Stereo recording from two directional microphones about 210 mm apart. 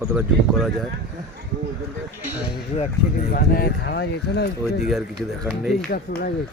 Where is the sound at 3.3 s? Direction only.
45° left (ahead or behind).